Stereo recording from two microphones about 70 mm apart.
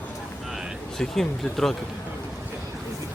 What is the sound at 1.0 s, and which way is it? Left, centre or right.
Speech, centre.